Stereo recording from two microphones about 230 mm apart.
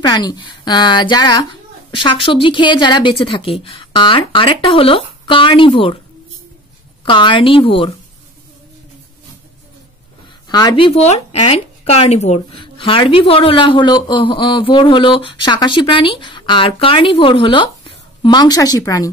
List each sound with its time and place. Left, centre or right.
0.0 s a woman's voice: centre
7.1 s a woman's voice: left
10.5 s a woman's voice: centre